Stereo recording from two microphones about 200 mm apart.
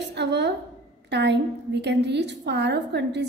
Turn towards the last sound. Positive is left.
turn(degrees=-60)  # may be behind; listen again after turning